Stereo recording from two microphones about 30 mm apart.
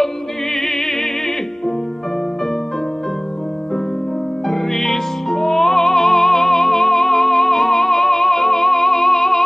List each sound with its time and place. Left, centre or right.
0.6 s opera: centre
4.5 s music: centre